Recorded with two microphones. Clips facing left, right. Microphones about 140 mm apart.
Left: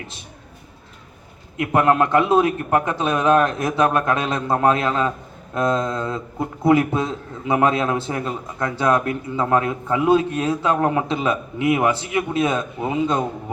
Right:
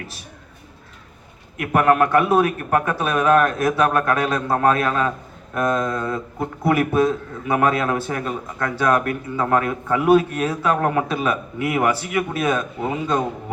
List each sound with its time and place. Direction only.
1.5 s a man's voice: 25° left (ahead or behind)